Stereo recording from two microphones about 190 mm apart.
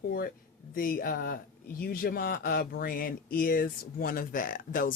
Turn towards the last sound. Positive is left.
turn(degrees=45)  # may be behind; listen again after turning